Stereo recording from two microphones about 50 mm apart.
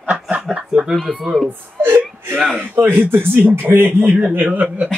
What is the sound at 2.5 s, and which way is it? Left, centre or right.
A man's voice, right.